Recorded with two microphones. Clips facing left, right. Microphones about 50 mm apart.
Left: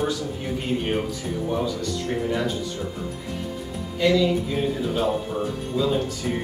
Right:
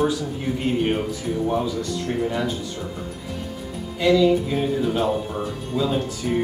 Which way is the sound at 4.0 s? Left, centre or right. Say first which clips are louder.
Right 3 dB; centre.